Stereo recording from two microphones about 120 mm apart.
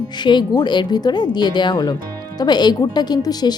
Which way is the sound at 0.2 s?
40° left (ahead or behind).